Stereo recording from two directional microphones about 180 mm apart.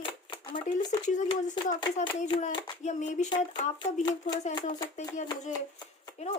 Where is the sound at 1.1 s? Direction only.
45° left (ahead or behind).